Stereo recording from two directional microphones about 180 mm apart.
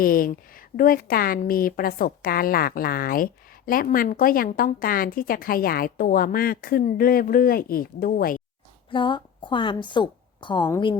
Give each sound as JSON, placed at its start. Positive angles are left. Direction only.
{"t": 0.0, "sound": "a woman's voice", "side_deg": 50}
{"t": 8.9, "sound": "a woman's voice", "side_deg": 25}